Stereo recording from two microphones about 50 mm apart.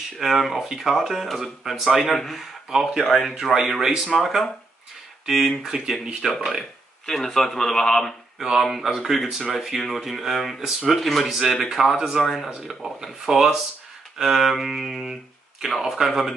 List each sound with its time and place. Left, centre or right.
0.2 s speech: centre
2.7 s speech: centre
7.1 s a man's voice: centre
8.5 s speech: centre
12.2 s speech: centre